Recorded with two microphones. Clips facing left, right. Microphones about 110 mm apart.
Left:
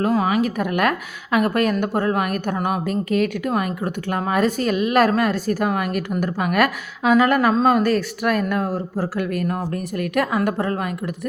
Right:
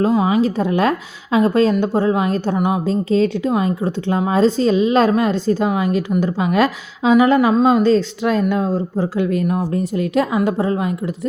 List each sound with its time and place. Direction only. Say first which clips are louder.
0.0 s speech: right 4 dB; 20° right (ahead or behind)